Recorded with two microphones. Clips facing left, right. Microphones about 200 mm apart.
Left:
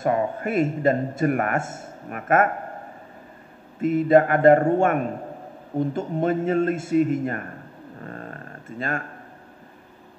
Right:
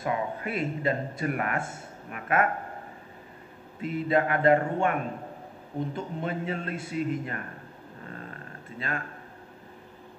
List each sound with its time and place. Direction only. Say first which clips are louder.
0.0 s a man's voice: left 7 dB; 45° left (ahead or behind)
3.8 s a man's voice: left 9 dB; 45° left (ahead or behind)
5.9 s a man's voice: left 9 dB; 45° left (ahead or behind)
8.6 s speech: left 6 dB; 45° left (ahead or behind)